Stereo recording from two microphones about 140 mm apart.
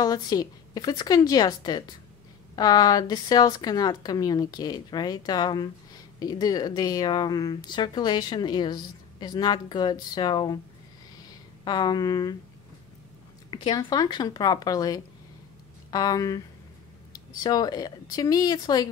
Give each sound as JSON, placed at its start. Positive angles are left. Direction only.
{"t": 0.0, "sound": "a woman's voice", "side_deg": 30}
{"t": 11.6, "sound": "a woman's voice", "side_deg": 30}
{"t": 13.5, "sound": "a woman's voice", "side_deg": 30}